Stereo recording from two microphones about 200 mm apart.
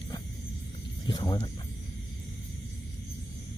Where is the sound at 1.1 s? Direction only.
20° left (ahead or behind).